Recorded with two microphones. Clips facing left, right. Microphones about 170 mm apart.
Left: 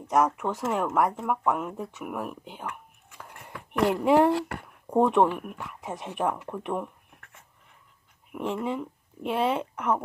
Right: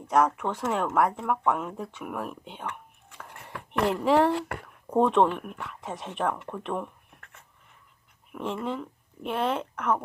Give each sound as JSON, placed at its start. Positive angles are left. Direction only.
{"t": 0.1, "sound": "speech", "side_deg": 5}
{"t": 8.3, "sound": "speech", "side_deg": 15}